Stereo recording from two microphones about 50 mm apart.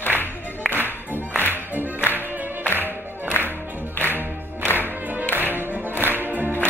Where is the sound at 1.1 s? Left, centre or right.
Left.